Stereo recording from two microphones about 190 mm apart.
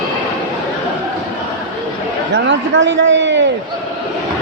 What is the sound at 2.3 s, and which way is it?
A man's voice, 70° right (ahead or behind).